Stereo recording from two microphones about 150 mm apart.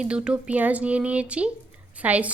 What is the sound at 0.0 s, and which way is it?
A woman's voice, 5° right (ahead or behind).